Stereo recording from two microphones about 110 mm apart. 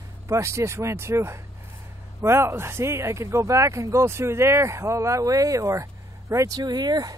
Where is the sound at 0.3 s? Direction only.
25° right (ahead or behind).